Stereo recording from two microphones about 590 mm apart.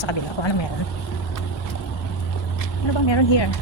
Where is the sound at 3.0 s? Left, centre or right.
Left.